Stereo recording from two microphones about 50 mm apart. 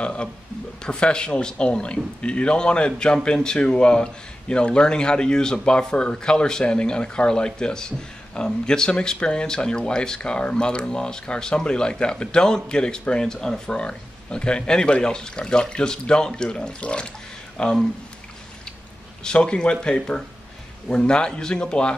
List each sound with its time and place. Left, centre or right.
0.0 s a man's voice: centre
19.2 s a man's voice: centre